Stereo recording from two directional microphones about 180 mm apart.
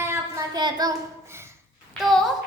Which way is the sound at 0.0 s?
15° right (ahead or behind).